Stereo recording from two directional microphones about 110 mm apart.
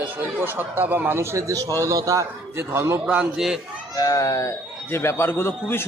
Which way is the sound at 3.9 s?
30° left (ahead or behind).